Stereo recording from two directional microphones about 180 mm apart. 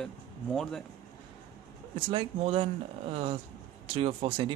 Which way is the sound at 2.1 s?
30° right (ahead or behind).